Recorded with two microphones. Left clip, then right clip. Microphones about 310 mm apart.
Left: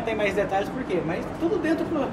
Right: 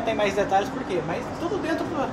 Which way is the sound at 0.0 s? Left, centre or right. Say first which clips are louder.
Right 1 dB; centre.